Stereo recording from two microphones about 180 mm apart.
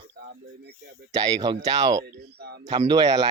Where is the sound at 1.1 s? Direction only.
20° right (ahead or behind).